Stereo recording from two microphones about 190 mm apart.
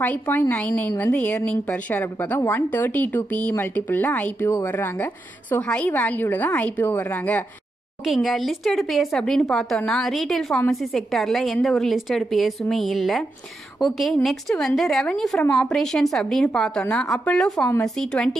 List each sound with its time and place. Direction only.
0.0 s speech: 10° left (ahead or behind)
8.0 s speech: centre (ahead or behind)
15.4 s speech: 15° left (ahead or behind)
15.7 s speech: centre (ahead or behind)